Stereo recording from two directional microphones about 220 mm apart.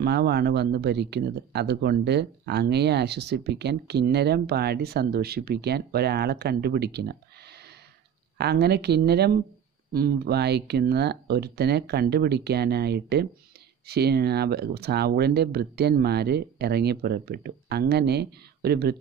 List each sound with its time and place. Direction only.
0.0 s speech: 45° right (ahead or behind)
8.4 s speech: 45° right (ahead or behind)